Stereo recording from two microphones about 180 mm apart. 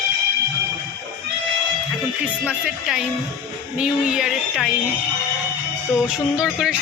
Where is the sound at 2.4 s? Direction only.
5° right (ahead or behind).